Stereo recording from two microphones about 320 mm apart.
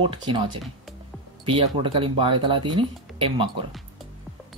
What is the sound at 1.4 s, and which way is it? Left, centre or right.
Speech, centre.